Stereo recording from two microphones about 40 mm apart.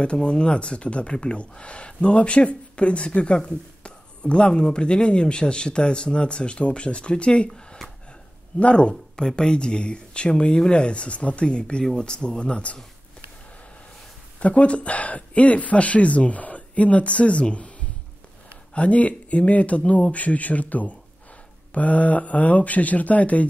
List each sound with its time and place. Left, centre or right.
0.0 s speech: left
7.4 s a sound: centre
8.5 s speech: left
9.1 s speech: centre
14.4 s speech: left